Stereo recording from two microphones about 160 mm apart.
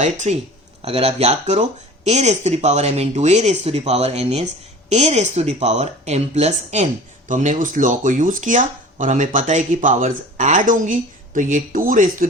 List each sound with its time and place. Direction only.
0.0 s speech: 50° right (ahead or behind)
0.8 s speech: 40° right (ahead or behind); by 12.3 s 55° right (ahead or behind)